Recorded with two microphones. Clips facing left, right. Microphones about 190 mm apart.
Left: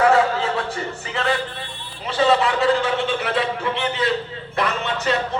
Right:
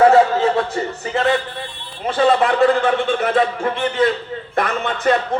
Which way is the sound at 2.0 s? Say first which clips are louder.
Right 3 dB; 50° right (ahead or behind).